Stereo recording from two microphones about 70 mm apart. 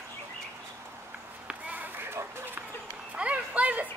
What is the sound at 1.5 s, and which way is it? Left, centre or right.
Run, right.